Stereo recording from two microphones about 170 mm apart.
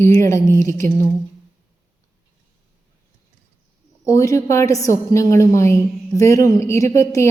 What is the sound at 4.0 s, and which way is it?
A woman's voice, 15° left (ahead or behind).